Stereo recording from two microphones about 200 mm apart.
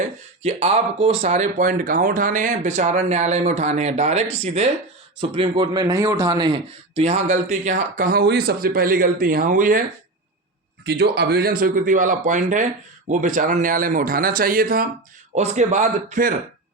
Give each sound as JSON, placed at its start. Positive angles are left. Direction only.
{"t": 0.4, "sound": "speech", "side_deg": -30}
{"t": 10.8, "sound": "a man's voice", "side_deg": -55}